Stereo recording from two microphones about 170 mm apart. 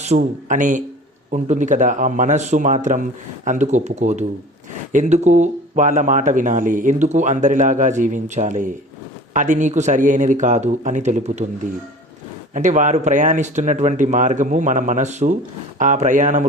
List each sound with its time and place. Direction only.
0.0 s speech: 45° right (ahead or behind)